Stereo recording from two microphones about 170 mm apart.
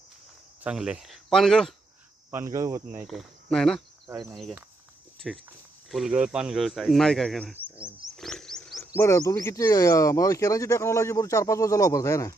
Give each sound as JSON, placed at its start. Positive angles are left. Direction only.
{"t": 0.6, "sound": "speech", "side_deg": -5}
{"t": 2.3, "sound": "speech", "side_deg": -15}
{"t": 3.0, "sound": "speech", "side_deg": 0}
{"t": 5.2, "sound": "speech", "side_deg": 0}
{"t": 7.5, "sound": "bird", "side_deg": -10}
{"t": 8.1, "sound": "wild animals", "side_deg": 5}
{"t": 9.0, "sound": "speech", "side_deg": 15}